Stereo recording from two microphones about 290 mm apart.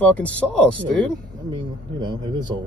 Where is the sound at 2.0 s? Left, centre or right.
Centre.